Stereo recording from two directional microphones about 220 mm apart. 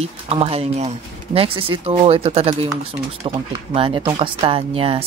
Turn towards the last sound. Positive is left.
turn(degrees=-25)  # may be behind; listen again after turning